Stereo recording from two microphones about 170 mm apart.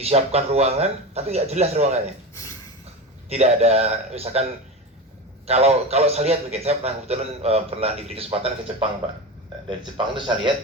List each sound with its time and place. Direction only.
0.0 s a man's voice: 35° right (ahead or behind)
2.3 s a sound: 20° left (ahead or behind)
3.2 s a man's voice: 40° right (ahead or behind)
5.5 s a man's voice: 40° right (ahead or behind)
10.2 s speech: 30° right (ahead or behind)